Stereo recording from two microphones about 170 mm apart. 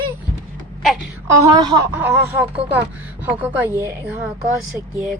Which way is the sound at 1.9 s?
10° right (ahead or behind).